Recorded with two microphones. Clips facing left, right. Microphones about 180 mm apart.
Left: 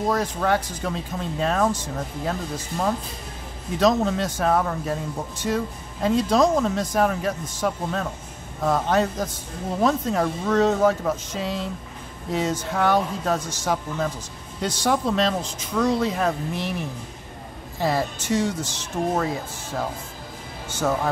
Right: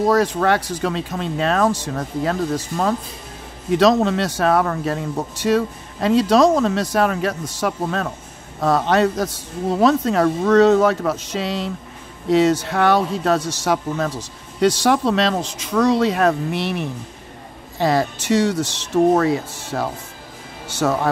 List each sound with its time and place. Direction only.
0.1 s speech: 75° right (ahead or behind)